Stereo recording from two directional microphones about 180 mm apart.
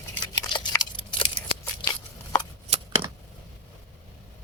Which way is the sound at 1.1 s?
30° left (ahead or behind).